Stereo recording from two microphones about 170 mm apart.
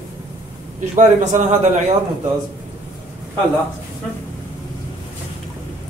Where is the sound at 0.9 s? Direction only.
45° right (ahead or behind).